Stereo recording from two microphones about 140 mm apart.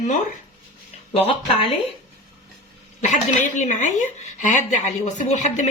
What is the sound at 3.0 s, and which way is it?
A woman's voice, 60° left (ahead or behind).